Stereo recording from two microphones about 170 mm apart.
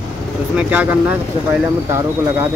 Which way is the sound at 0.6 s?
10° right (ahead or behind).